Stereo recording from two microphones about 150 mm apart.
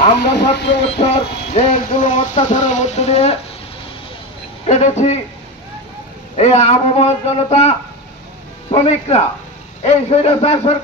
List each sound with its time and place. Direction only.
0.2 s speech: 90° left
1.0 s a man's voice: 40° left (ahead or behind)
1.5 s a man's voice: 50° left (ahead or behind)
4.6 s a man's voice: 50° left (ahead or behind)
6.3 s a man's voice: 45° left (ahead or behind)